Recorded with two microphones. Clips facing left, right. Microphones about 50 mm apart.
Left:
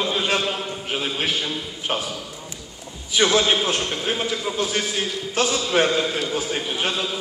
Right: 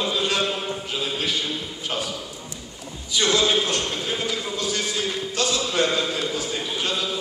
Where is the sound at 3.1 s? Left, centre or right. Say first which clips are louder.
Left 2 dB; left.